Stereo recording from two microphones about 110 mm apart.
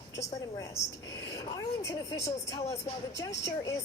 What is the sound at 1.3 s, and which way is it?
A woman's voice, 25° left (ahead or behind).